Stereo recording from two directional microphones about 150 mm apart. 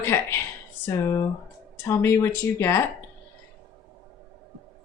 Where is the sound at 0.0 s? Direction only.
15° left (ahead or behind).